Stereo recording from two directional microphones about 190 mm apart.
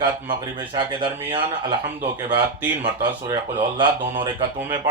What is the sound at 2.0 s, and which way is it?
Speech, 40° right (ahead or behind).